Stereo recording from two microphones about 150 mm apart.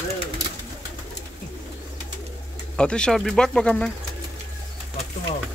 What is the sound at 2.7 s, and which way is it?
Speech, 5° left (ahead or behind).